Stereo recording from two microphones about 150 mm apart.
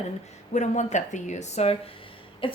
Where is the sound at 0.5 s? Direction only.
50° left (ahead or behind).